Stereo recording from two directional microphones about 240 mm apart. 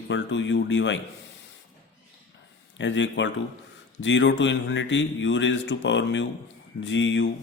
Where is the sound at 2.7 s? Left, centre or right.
Left.